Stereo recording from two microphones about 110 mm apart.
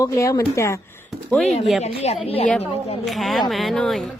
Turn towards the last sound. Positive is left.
turn(degrees=5)  # may be behind; listen again after turning